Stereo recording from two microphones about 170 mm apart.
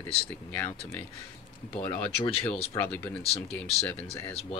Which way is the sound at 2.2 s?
30° left (ahead or behind).